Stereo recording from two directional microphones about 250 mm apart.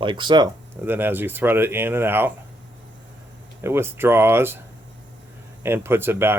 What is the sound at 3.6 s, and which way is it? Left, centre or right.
Speech, centre.